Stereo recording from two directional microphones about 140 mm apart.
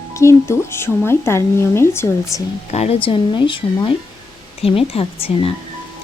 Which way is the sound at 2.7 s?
45° left (ahead or behind).